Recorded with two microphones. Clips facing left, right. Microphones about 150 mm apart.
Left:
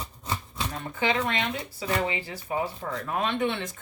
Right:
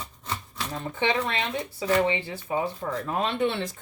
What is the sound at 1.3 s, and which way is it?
A woman's voice, 30° right (ahead or behind).